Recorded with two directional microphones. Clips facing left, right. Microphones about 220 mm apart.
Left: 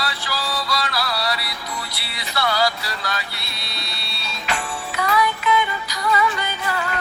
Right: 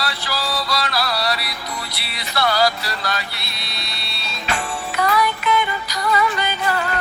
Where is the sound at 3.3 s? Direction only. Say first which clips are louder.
Right 1 dB; 85° right.